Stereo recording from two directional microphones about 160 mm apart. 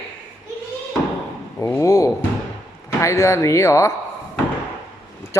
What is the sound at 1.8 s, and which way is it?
Speech, 20° left (ahead or behind).